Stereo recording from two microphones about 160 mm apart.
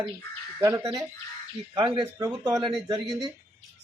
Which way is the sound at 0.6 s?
20° right (ahead or behind).